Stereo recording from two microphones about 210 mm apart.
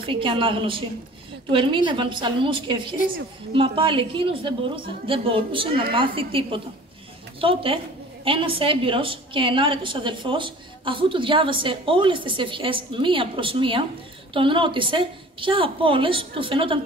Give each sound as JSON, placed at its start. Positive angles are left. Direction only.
{"t": 0.0, "sound": "a woman's voice", "side_deg": -25}